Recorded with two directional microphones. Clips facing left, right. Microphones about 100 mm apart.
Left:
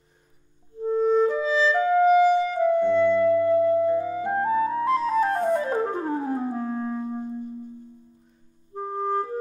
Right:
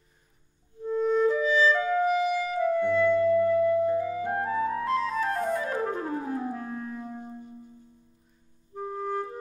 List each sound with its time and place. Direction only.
0.8 s music: 35° left (ahead or behind)
8.7 s clarinet: 35° left (ahead or behind)